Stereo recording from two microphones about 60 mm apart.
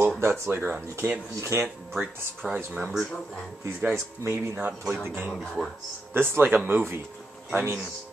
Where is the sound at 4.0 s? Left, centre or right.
Right.